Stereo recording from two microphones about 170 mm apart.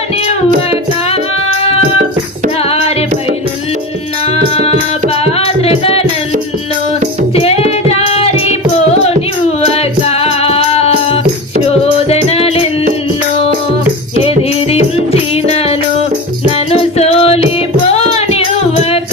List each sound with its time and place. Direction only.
0.3 s music: 35° left (ahead or behind)
2.6 s music: 35° left (ahead or behind)
4.5 s music: 35° left (ahead or behind)
7.3 s music: 35° left (ahead or behind)
14.2 s music: 35° left (ahead or behind)